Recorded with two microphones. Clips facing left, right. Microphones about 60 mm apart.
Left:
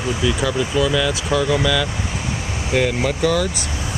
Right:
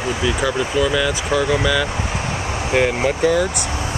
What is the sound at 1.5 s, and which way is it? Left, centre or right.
Speech, centre.